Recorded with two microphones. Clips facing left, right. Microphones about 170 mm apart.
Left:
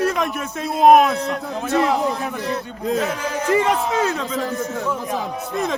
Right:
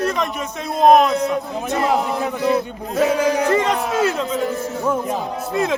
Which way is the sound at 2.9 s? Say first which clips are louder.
Right 9 dB; 70° right (ahead or behind).